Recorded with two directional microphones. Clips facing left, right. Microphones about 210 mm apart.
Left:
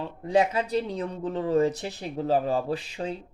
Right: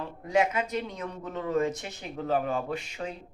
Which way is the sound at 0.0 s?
30° left (ahead or behind).